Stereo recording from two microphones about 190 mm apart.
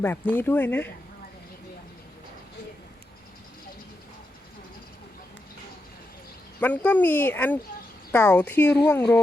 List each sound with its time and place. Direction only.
0.0 s speech: 10° left (ahead or behind)
6.6 s speech: 10° left (ahead or behind)